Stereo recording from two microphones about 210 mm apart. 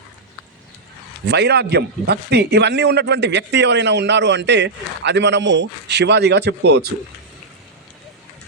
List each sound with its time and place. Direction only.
1.3 s a man's voice: 50° right (ahead or behind)